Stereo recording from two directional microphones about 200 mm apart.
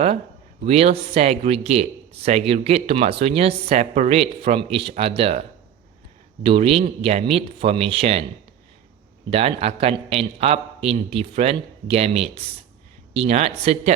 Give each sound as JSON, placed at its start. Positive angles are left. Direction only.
{"t": 0.6, "sound": "a man's voice", "side_deg": -30}
{"t": 9.3, "sound": "a man's voice", "side_deg": -30}